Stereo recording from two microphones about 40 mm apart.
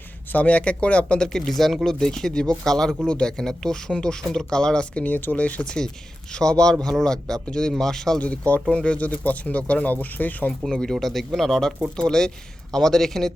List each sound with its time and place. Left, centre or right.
0.3 s speech: left
1.0 s speech: centre
5.0 s speech: left
5.6 s speech: centre
8.2 s speech: left
8.7 s speech: left
10.7 s speech: centre
11.0 s speech: centre